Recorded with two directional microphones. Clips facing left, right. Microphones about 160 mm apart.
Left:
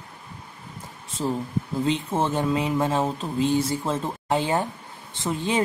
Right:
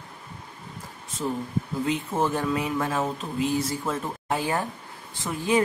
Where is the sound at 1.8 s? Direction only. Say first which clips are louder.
Left 1 dB; 25° left (ahead or behind).